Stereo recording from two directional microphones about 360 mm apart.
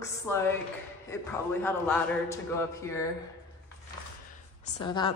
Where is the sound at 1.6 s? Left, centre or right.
Centre.